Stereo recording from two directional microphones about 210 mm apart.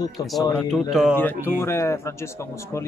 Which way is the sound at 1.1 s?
10° left (ahead or behind).